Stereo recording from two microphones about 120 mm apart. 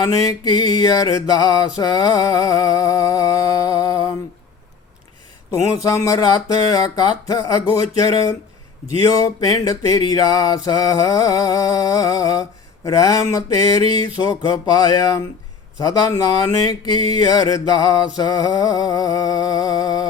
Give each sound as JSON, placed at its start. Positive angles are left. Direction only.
{"t": 0.0, "sound": "mantra", "side_deg": 30}
{"t": 5.5, "sound": "a sound", "side_deg": 30}
{"t": 14.5, "sound": "mantra", "side_deg": 30}